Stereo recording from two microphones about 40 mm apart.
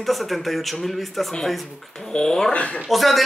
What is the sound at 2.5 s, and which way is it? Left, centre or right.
Speech, left.